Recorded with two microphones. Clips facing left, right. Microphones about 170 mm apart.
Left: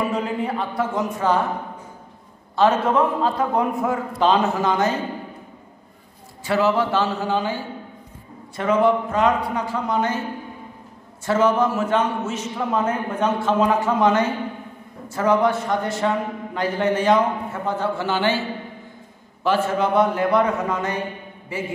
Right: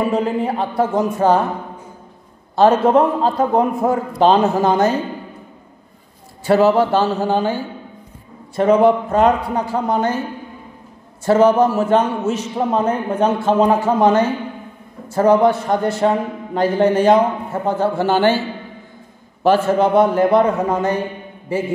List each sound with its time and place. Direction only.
0.0 s a man's voice: 30° right (ahead or behind)
2.5 s a man's voice: 40° right (ahead or behind)
6.5 s a man's voice: 40° right (ahead or behind)
8.5 s a man's voice: 35° right (ahead or behind)
11.2 s a man's voice: 35° right (ahead or behind)
19.4 s a man's voice: 40° right (ahead or behind)